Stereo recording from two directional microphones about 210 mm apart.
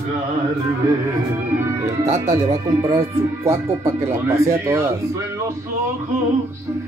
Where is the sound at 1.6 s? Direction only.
10° right (ahead or behind).